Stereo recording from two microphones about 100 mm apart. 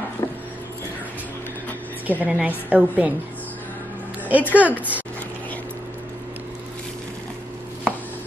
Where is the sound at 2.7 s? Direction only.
15° right (ahead or behind).